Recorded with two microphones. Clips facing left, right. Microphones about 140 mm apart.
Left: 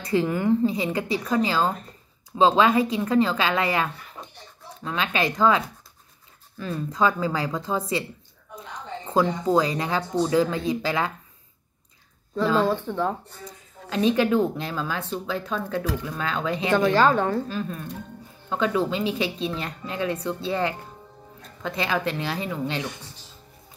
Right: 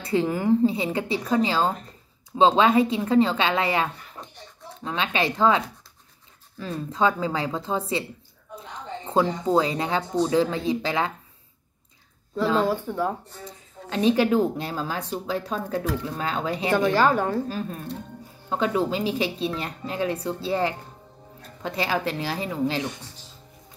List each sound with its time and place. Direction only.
0.0 s a woman's voice: 30° right (ahead or behind)
6.6 s a woman's voice: 30° right (ahead or behind)
9.0 s a woman's voice: 30° right (ahead or behind)
12.6 s speech: 10° right (ahead or behind)
13.5 s a woman's voice: 30° right (ahead or behind)
16.7 s speech: 10° right (ahead or behind)
17.5 s a woman's voice: 35° right (ahead or behind)